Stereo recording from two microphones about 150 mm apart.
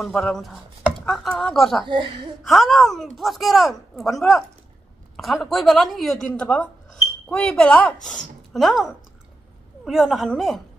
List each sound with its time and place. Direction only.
0.0 s speech: 5° left (ahead or behind)
1.9 s speech: 30° right (ahead or behind)
2.4 s speech: centre (ahead or behind)